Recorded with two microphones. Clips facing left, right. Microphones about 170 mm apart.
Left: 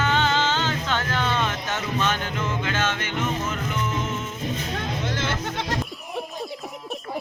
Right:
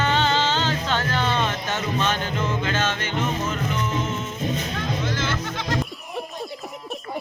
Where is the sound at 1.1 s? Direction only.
15° right (ahead or behind).